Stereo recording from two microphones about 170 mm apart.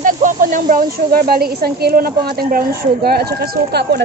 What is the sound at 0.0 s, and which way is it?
Speech, 55° right (ahead or behind).